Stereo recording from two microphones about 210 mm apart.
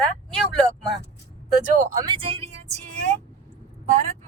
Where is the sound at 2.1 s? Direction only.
25° right (ahead or behind).